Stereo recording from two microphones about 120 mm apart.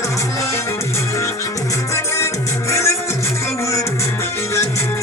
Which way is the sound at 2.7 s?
25° left (ahead or behind).